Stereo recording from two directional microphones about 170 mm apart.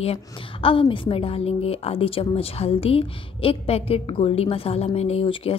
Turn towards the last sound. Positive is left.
turn(degrees=35)  # may be behind; listen again after turning